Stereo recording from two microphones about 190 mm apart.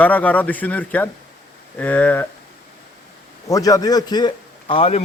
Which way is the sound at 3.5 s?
20° left (ahead or behind).